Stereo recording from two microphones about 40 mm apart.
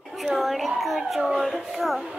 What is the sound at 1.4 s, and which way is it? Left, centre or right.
Speech, centre.